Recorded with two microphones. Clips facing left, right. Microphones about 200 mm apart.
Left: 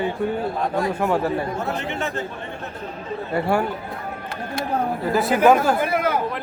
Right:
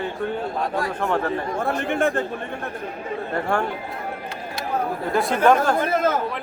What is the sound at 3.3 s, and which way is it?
Speech, 5° left (ahead or behind).